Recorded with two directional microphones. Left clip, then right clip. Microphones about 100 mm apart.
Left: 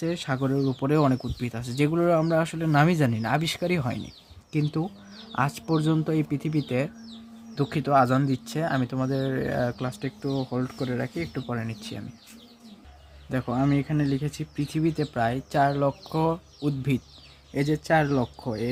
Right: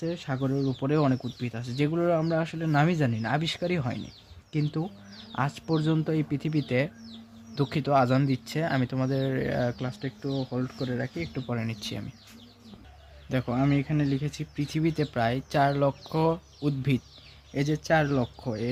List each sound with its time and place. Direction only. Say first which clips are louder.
0.0 s speech: left 3 dB; 55° left (ahead or behind); by 8.7 s 20° left (ahead or behind)
9.0 s speech: left 1 dB; 10° left (ahead or behind)
9.7 s speech: left 3 dB; 25° left (ahead or behind)
10.5 s speech: left 2 dB; 40° left (ahead or behind)
11.1 s speech: left 2 dB; 20° left (ahead or behind)
11.5 s speech: even; 5° left (ahead or behind)
13.3 s speech: left 1 dB; 10° left (ahead or behind)
14.9 s speech: left 1 dB; 5° left (ahead or behind)